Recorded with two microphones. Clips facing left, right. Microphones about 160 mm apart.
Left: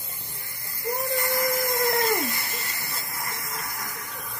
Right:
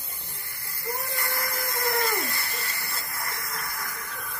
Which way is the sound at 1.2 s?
15° left (ahead or behind).